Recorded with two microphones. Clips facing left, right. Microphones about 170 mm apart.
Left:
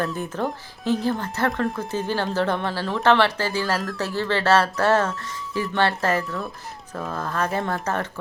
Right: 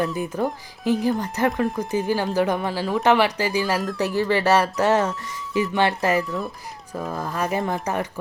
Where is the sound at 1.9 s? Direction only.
15° right (ahead or behind).